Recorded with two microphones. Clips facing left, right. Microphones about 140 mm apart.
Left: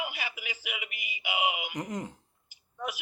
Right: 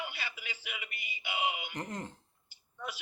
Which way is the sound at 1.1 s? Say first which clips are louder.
Left 4 dB; 90° left.